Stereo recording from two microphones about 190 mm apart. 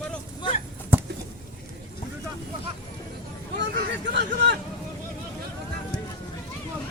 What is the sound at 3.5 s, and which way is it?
Hubbub, 60° right (ahead or behind).